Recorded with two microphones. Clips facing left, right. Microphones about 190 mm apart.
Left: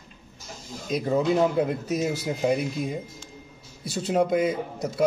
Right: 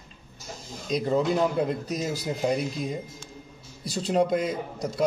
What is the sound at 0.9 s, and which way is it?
Speech, 5° left (ahead or behind).